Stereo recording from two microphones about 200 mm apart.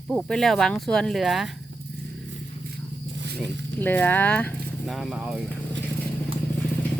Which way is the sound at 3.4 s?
10° left (ahead or behind).